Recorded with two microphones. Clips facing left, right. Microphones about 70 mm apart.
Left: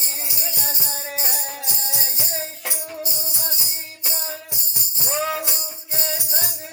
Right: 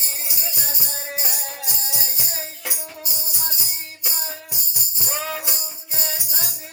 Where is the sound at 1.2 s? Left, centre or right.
Left.